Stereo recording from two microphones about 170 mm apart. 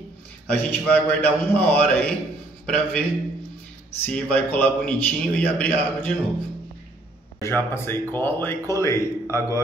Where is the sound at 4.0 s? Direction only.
10° left (ahead or behind).